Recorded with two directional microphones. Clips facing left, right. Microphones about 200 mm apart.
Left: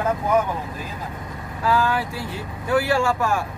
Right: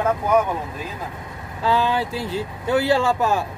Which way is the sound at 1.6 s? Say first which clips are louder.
Right 1 dB; 25° right (ahead or behind).